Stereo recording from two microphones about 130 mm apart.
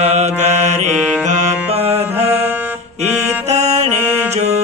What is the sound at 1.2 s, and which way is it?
Music, 65° right (ahead or behind).